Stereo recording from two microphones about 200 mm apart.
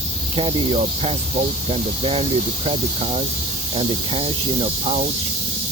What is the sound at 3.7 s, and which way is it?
Speech, 25° right (ahead or behind).